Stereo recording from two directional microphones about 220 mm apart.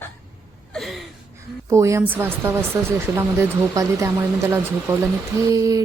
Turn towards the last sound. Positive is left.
turn(degrees=-15)  # may be behind; listen again after turning